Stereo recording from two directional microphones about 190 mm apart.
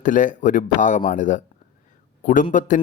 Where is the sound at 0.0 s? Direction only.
45° left (ahead or behind).